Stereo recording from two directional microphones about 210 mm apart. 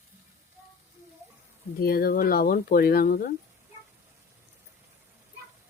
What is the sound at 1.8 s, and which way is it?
Speech, 45° left (ahead or behind).